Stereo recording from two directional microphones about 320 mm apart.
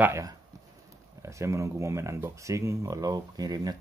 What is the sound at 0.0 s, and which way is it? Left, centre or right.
Speech, centre.